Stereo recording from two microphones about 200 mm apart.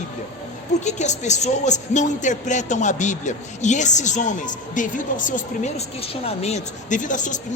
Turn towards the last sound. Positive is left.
turn(degrees=40)  # may be behind; listen again after turning